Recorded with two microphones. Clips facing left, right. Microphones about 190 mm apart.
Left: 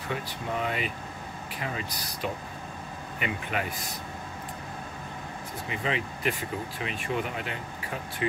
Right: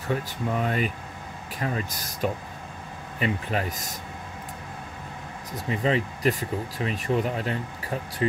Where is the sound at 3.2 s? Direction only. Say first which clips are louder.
Right 5 dB; 35° right (ahead or behind).